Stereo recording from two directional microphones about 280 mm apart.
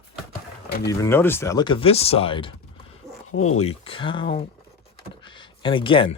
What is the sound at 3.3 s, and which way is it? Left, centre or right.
Speech, left.